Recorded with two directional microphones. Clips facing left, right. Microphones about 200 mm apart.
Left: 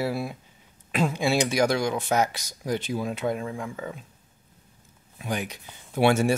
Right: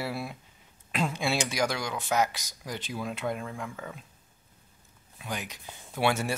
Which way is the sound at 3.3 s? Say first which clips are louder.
Left 5 dB; 15° left (ahead or behind).